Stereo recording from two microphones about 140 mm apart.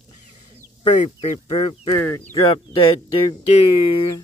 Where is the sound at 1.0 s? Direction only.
45° left (ahead or behind).